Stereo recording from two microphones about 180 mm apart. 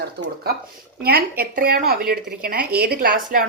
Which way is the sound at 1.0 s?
55° right (ahead or behind).